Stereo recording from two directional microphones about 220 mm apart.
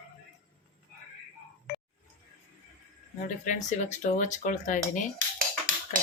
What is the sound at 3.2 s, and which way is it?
Speech, 35° left (ahead or behind).